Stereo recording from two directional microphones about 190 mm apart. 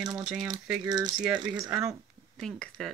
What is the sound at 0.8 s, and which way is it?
Speech, 20° right (ahead or behind).